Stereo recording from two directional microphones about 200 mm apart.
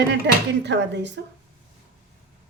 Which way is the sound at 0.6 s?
60° right (ahead or behind).